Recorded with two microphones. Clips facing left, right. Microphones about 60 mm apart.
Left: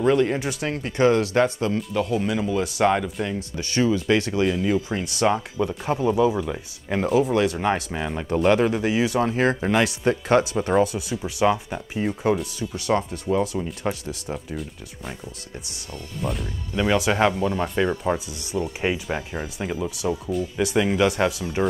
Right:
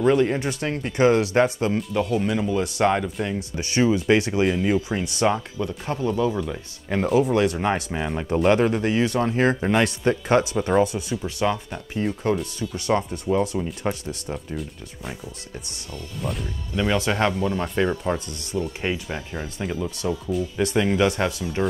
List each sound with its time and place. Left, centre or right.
0.0 s speech: centre
1.8 s speech: centre
3.5 s speech: centre
4.8 s speech: centre
5.6 s speech: centre
16.2 s speech: centre
20.2 s speech: centre